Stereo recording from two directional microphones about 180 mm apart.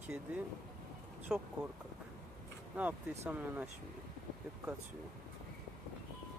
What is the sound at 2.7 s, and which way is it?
Speech, 10° right (ahead or behind).